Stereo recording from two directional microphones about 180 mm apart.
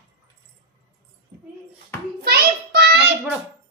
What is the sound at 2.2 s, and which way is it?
Child singing, 65° right (ahead or behind).